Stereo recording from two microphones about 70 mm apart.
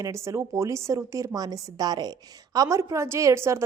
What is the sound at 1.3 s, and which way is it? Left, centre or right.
Speech, right.